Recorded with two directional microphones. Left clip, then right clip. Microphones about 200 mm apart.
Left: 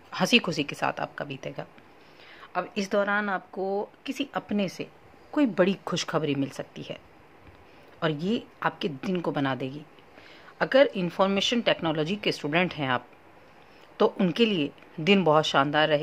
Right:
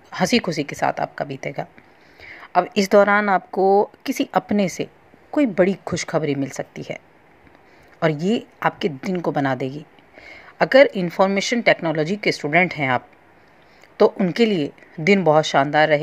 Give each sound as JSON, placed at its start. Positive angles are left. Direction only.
{"t": 0.1, "sound": "a woman's voice", "side_deg": -10}
{"t": 5.3, "sound": "a woman's voice", "side_deg": -10}
{"t": 8.0, "sound": "a woman's voice", "side_deg": -15}